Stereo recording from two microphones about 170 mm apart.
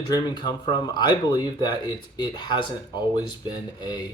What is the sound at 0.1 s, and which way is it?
Speech, 25° left (ahead or behind).